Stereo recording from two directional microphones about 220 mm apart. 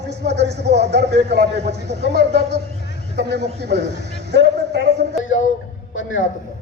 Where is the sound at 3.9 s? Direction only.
50° right (ahead or behind).